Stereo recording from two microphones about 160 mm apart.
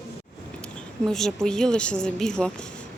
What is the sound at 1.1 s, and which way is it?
A woman's voice, 5° left (ahead or behind).